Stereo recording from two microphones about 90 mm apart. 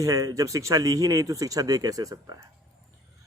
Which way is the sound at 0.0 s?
40° right (ahead or behind).